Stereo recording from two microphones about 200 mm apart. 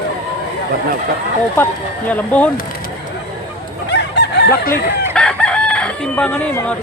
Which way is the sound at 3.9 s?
60° left (ahead or behind).